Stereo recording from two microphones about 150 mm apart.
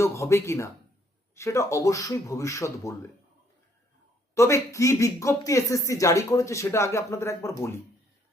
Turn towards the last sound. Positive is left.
turn(degrees=20)  # may be behind; listen again after turning